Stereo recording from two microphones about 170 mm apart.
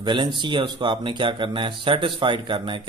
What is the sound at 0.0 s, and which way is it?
A man's voice, 30° right (ahead or behind).